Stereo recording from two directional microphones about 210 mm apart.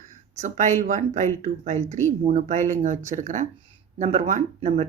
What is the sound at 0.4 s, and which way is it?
Speech, 35° right (ahead or behind).